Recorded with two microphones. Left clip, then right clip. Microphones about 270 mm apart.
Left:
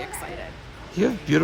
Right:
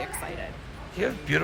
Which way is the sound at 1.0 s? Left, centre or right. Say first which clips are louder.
Left 4 dB; left.